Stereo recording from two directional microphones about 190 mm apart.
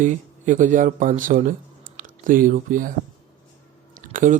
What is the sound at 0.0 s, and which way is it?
Speech, 40° right (ahead or behind).